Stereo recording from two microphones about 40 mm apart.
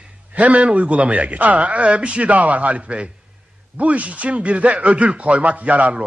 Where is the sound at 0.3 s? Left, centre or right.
Right.